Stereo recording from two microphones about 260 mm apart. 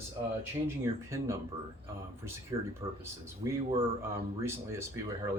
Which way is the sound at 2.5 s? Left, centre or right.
Centre.